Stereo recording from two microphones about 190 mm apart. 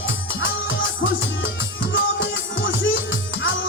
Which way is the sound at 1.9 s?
85° left.